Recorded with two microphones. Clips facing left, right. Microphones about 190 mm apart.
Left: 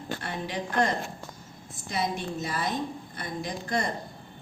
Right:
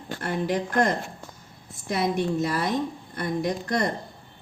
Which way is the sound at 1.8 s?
60° right (ahead or behind).